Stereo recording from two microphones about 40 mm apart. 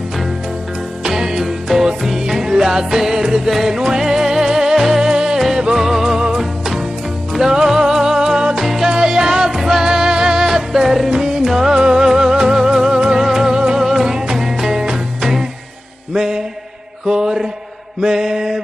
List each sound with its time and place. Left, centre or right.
1.0 s music: centre
8.9 s music: centre
16.1 s mantra: centre